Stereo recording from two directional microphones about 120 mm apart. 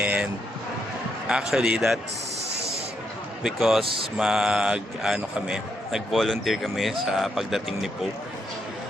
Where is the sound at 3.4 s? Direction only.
Centre (ahead or behind).